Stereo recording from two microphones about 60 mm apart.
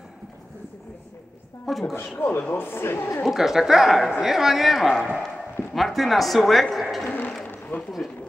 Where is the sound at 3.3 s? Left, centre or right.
Centre.